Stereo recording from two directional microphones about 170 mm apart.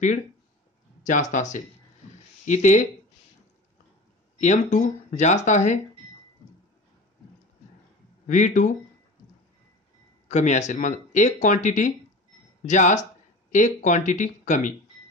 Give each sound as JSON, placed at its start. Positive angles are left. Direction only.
{"t": 1.0, "sound": "speech", "side_deg": 50}
{"t": 4.4, "sound": "speech", "side_deg": 45}
{"t": 8.3, "sound": "speech", "side_deg": 45}
{"t": 10.2, "sound": "speech", "side_deg": 45}